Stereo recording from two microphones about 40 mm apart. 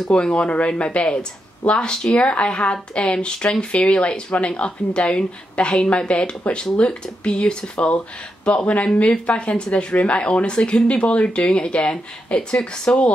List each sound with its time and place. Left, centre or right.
0.1 s speech: left